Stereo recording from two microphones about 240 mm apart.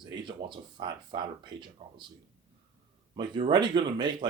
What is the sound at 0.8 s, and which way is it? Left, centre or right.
Speech, centre.